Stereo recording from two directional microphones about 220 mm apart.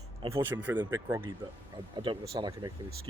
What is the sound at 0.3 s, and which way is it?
Speech, 10° right (ahead or behind).